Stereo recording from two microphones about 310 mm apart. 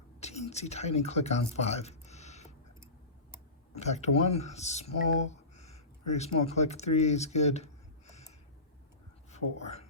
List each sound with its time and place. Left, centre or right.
0.2 s speech: left
1.5 s a sound: left
3.8 s speech: left
9.3 s speech: centre